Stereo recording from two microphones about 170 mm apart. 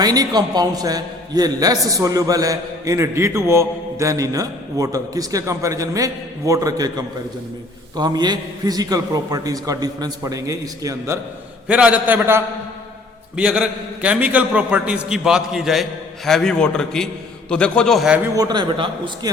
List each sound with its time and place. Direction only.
0.0 s a man's voice: 20° right (ahead or behind)
11.7 s a man's voice: 10° right (ahead or behind)
18.3 s a man's voice: 25° right (ahead or behind)